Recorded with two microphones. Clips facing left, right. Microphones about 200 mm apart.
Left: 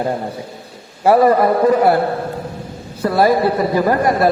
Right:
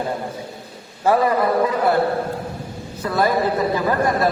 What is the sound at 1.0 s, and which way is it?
Speech, 45° left (ahead or behind).